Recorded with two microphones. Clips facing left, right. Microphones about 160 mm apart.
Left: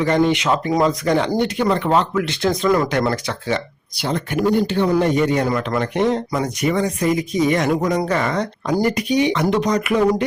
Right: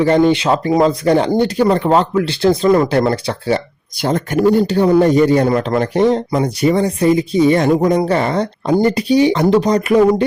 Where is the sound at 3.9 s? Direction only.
45° right (ahead or behind).